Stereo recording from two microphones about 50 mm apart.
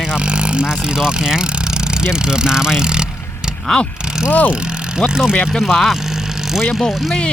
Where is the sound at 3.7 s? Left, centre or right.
Centre.